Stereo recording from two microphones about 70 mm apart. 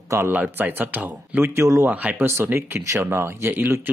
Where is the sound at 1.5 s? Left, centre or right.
Right.